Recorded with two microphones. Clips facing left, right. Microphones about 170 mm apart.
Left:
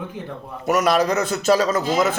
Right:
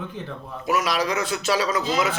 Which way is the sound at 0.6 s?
50° left (ahead or behind).